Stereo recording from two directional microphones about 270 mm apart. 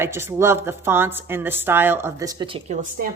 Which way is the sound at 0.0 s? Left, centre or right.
Centre.